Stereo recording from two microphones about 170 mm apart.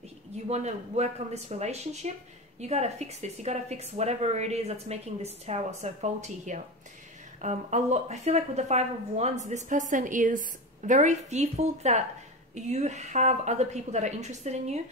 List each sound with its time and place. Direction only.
0.5 s a woman's voice: 40° right (ahead or behind)